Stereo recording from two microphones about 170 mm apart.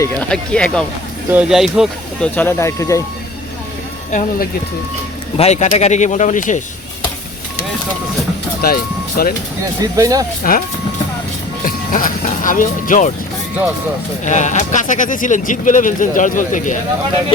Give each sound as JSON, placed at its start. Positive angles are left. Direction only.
{"t": 0.0, "sound": "speech", "side_deg": 5}
{"t": 1.3, "sound": "speech", "side_deg": -5}
{"t": 2.3, "sound": "speech", "side_deg": 10}
{"t": 4.1, "sound": "speech", "side_deg": 45}
{"t": 8.6, "sound": "speech", "side_deg": 60}
{"t": 9.8, "sound": "speech", "side_deg": -20}
{"t": 10.4, "sound": "speech", "side_deg": 55}
{"t": 11.6, "sound": "speech", "side_deg": 55}
{"t": 14.3, "sound": "speech", "side_deg": 45}